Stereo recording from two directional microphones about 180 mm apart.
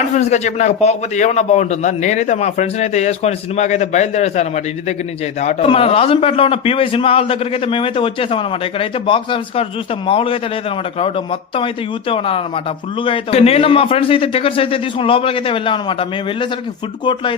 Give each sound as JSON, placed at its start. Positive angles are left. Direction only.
{"t": 0.1, "sound": "a man's voice", "side_deg": 40}